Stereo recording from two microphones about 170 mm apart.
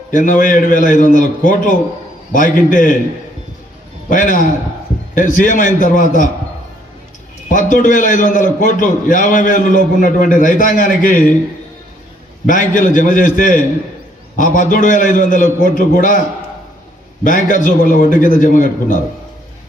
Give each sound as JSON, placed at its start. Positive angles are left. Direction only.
{"t": 0.1, "sound": "a man's voice", "side_deg": 50}
{"t": 4.1, "sound": "a man's voice", "side_deg": 50}
{"t": 7.5, "sound": "a man's voice", "side_deg": 50}
{"t": 12.5, "sound": "a man's voice", "side_deg": 50}
{"t": 17.2, "sound": "a man's voice", "side_deg": 50}